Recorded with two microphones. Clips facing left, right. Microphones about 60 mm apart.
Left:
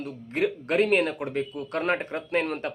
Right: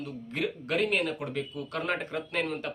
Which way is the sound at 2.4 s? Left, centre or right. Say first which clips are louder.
Left 4 dB; left.